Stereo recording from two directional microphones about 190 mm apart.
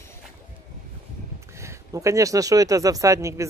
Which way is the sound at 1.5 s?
15° right (ahead or behind).